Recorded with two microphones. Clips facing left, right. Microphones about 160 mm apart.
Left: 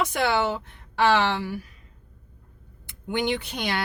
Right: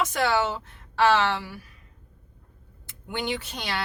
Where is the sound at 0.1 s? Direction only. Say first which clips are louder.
Left 1 dB; 15° left (ahead or behind).